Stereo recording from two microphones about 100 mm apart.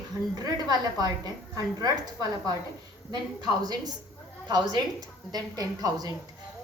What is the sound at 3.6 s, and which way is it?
A woman's voice, 40° right (ahead or behind).